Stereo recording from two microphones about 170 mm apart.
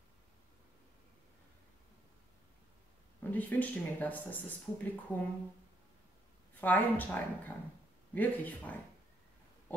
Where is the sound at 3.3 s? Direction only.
10° left (ahead or behind).